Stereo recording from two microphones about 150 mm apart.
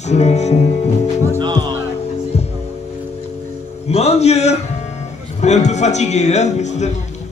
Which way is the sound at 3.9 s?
45° left (ahead or behind).